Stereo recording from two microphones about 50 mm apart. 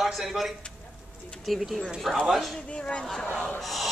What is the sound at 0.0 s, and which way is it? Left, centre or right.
A man's voice, centre.